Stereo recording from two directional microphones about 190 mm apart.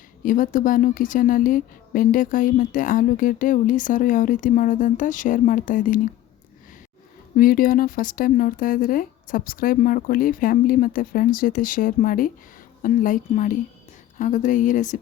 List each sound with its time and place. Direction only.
0.2 s a woman's voice: 45° left (ahead or behind)
7.3 s a woman's voice: 50° left (ahead or behind)